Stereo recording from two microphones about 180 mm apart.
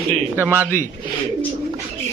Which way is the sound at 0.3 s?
10° right (ahead or behind).